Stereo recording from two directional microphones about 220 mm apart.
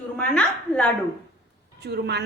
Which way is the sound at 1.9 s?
50° right (ahead or behind).